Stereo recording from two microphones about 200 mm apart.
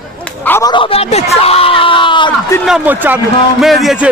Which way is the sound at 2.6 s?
5° right (ahead or behind).